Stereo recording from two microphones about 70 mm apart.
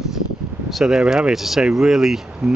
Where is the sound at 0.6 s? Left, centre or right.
Centre.